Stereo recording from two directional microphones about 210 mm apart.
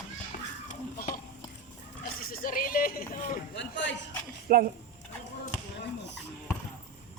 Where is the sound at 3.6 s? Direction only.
60° left (ahead or behind).